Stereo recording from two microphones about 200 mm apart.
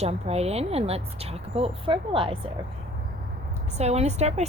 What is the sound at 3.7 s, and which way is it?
Speech, 35° right (ahead or behind).